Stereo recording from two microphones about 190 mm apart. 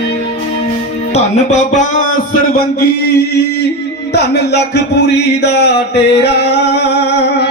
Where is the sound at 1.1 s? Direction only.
40° left (ahead or behind).